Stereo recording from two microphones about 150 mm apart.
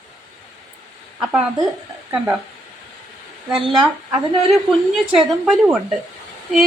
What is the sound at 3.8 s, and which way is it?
A woman's voice, centre (ahead or behind).